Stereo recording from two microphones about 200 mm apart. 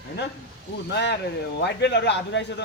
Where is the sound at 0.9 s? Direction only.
60° left (ahead or behind).